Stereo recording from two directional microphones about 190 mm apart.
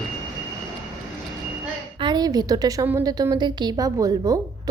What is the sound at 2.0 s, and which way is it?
A woman's voice, 25° right (ahead or behind).